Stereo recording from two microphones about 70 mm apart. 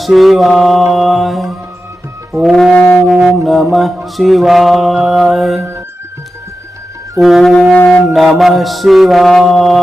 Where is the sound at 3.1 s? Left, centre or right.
Centre.